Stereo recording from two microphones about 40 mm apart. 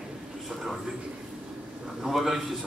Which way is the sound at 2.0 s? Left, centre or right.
Centre.